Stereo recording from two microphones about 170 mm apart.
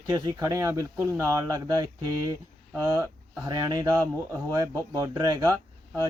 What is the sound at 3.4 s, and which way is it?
Speech, 25° right (ahead or behind).